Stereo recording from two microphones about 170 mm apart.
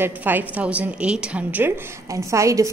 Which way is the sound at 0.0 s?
10° right (ahead or behind).